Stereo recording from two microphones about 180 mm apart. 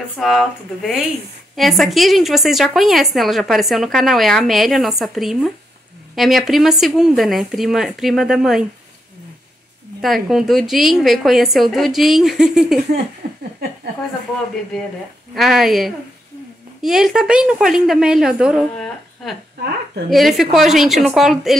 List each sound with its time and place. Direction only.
0.2 s a woman's voice: centre (ahead or behind)
10.0 s a woman's voice: centre (ahead or behind)
13.2 s a sound: 60° right (ahead or behind)
14.7 s a woman's voice: centre (ahead or behind)